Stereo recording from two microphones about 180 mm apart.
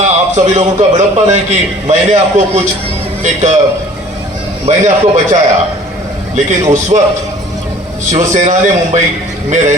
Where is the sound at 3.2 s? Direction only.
40° right (ahead or behind).